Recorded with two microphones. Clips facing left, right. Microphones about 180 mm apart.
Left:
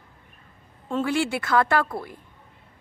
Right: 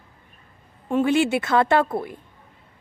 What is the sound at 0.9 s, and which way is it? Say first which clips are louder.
Speech: right 5 dB; 20° right (ahead or behind).